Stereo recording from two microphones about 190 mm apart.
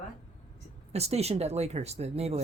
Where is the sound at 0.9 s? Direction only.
35° right (ahead or behind).